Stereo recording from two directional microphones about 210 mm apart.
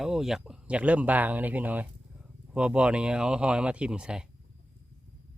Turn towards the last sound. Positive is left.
turn(degrees=-5)  # may be behind; listen again after turning